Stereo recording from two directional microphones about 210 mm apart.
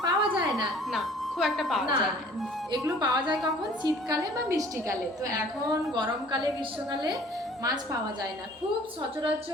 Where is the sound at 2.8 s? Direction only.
20° right (ahead or behind).